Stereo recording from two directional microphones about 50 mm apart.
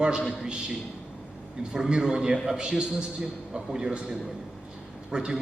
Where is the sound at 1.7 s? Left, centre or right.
Centre.